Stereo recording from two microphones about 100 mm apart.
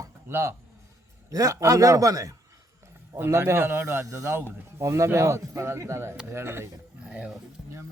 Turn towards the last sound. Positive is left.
turn(degrees=-10)  # may be behind; listen again after turning